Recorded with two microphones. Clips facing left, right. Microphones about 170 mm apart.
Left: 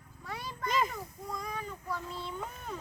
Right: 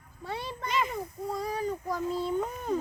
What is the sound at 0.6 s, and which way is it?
Speech, 45° left (ahead or behind).